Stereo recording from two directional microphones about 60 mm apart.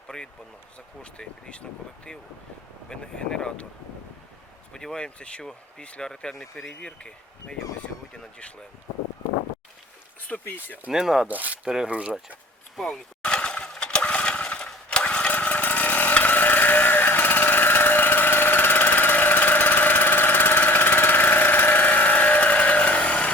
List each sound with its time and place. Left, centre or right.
0.1 s speech: centre
2.9 s speech: centre
4.7 s speech: centre
10.2 s speech: left
10.9 s speech: centre
11.3 s speech: right
12.7 s speech: centre
13.2 s breaking: centre
14.8 s a sound: centre